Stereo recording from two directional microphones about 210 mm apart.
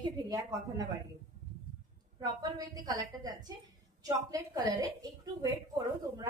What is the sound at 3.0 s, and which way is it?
A woman's voice, 20° right (ahead or behind).